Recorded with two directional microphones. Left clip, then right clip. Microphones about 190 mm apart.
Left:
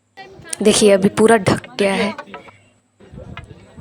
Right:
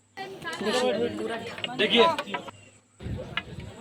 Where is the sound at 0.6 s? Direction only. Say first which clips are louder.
Left 13 dB; 55° left (ahead or behind).